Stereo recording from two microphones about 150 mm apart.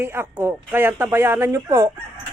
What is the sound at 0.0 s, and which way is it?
Speech, 15° right (ahead or behind).